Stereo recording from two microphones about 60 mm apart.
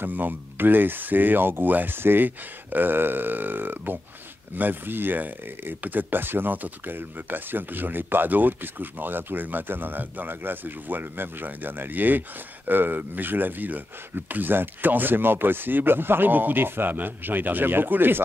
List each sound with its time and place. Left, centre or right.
0.0 s speech: right